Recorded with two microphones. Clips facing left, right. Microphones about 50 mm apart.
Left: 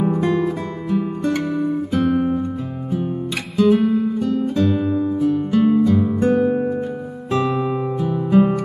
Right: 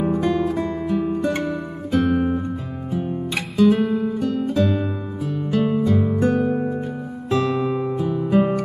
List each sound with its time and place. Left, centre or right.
0.1 s music: centre
0.8 s music: centre
3.5 s music: centre